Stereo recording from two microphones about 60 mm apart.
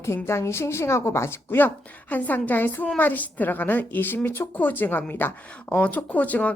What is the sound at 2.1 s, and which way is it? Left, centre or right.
A woman's voice, left.